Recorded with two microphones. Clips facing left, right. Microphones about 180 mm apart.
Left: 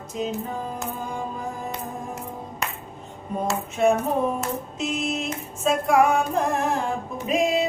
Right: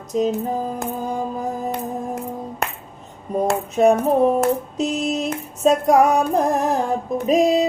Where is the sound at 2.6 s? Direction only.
55° right (ahead or behind).